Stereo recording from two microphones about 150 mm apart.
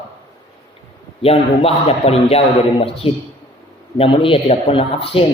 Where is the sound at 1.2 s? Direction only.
40° left (ahead or behind).